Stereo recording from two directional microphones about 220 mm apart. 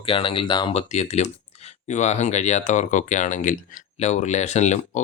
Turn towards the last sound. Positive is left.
turn(degrees=30)  # may be behind; listen again after turning